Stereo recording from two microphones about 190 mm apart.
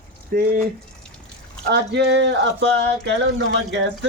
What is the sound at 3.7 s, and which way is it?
Speech, 70° right (ahead or behind).